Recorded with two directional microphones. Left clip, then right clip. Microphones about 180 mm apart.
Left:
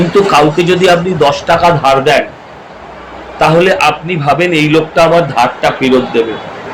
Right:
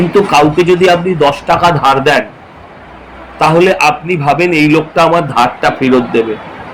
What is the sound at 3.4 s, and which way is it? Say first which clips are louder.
A man's voice: even; 20° right (ahead or behind).